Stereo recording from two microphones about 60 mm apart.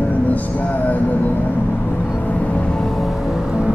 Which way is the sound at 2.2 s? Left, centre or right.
Left.